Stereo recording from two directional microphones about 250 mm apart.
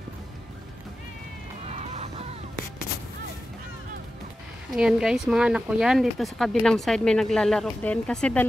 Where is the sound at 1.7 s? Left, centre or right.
Right.